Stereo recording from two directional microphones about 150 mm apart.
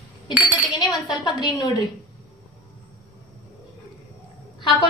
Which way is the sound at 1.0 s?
Centre (ahead or behind).